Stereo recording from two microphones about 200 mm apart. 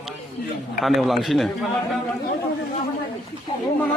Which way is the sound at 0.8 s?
Centre (ahead or behind).